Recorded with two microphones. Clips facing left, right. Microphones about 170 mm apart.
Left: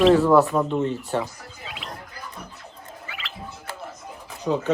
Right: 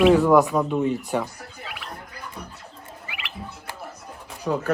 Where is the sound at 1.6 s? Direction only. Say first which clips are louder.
Left 1 dB; 20° left (ahead or behind).